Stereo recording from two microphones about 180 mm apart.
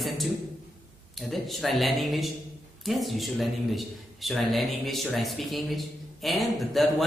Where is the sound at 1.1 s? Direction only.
Centre (ahead or behind).